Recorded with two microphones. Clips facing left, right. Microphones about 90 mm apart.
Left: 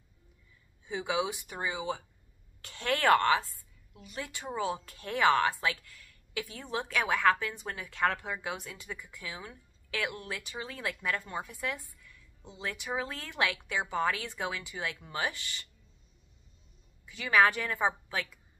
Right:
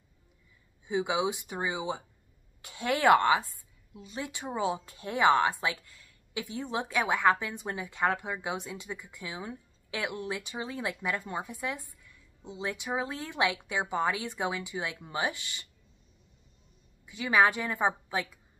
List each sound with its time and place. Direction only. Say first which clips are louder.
0.8 s a woman's voice: right 3 dB; 15° right (ahead or behind)
17.0 s a woman's voice: right 1 dB; 20° right (ahead or behind)